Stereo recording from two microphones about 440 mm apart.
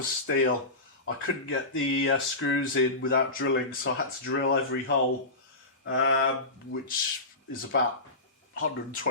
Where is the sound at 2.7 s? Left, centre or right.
Left.